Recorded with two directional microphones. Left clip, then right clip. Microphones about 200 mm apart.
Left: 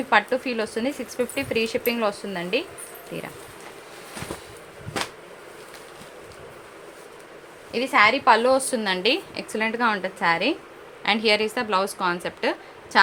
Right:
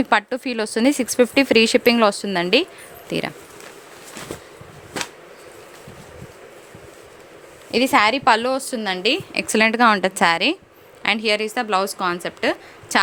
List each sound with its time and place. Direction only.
0.0 s speech: 65° right (ahead or behind)
7.7 s speech: 60° right (ahead or behind)
8.5 s a woman's voice: 35° right (ahead or behind)
9.3 s speech: 45° right (ahead or behind); by 10.5 s 60° right (ahead or behind)
11.0 s a woman's voice: 35° right (ahead or behind)
12.9 s speech: 40° right (ahead or behind)